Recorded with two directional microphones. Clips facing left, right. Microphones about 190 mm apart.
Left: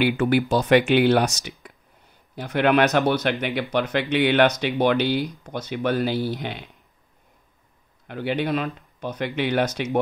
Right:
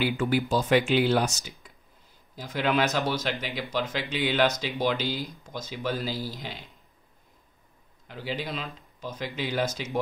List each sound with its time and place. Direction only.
0.0 s speech: 65° left (ahead or behind)
8.1 s speech: 65° left (ahead or behind)